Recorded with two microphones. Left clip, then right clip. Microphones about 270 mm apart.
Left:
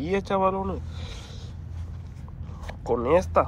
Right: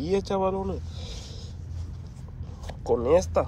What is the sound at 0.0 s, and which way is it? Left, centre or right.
Speech, centre.